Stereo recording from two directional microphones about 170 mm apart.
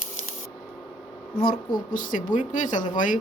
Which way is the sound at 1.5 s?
55° left (ahead or behind).